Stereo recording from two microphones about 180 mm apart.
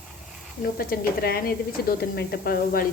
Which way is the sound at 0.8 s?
55° left (ahead or behind).